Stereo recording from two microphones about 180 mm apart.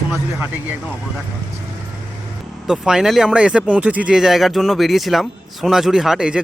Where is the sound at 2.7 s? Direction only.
5° right (ahead or behind).